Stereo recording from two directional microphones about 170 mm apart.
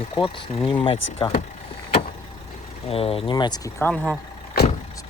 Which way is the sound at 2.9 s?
35° left (ahead or behind).